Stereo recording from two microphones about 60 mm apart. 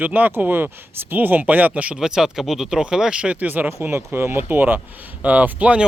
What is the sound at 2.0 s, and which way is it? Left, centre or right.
Speech, centre.